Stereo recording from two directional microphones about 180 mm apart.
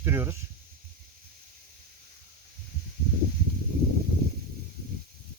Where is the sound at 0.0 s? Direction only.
10° right (ahead or behind).